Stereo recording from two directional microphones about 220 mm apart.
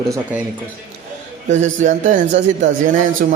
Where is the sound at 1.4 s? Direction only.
35° right (ahead or behind).